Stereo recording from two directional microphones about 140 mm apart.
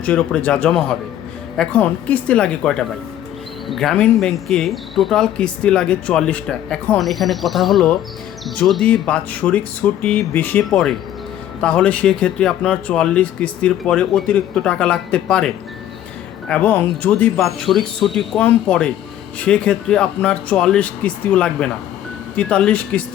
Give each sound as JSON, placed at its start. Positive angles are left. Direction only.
{"t": 0.0, "sound": "speech", "side_deg": 5}